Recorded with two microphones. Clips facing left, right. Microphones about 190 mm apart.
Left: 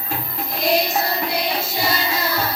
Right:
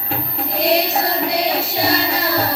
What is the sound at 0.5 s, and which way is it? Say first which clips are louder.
Music: right 2 dB; 70° right (ahead or behind).